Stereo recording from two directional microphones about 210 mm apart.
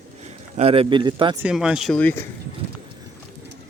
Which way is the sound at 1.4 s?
5° right (ahead or behind).